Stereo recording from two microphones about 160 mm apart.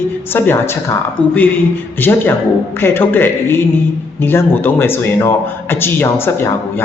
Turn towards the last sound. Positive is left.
turn(degrees=15)  # may be behind; listen again after turning